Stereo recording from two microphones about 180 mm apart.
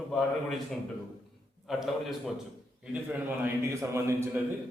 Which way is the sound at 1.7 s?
Centre (ahead or behind).